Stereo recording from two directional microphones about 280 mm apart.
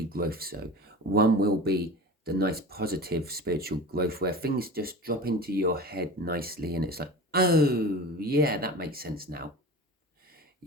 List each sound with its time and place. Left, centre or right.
0.1 s speech: right